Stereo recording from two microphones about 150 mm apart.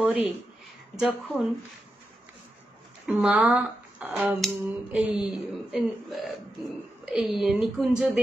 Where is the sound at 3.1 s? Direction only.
10° right (ahead or behind).